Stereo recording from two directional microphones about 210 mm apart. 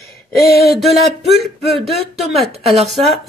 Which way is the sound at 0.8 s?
Centre (ahead or behind).